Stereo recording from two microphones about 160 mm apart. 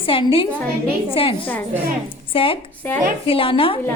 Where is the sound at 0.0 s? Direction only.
35° left (ahead or behind).